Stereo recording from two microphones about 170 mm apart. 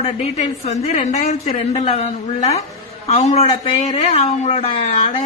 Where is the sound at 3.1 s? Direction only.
40° left (ahead or behind).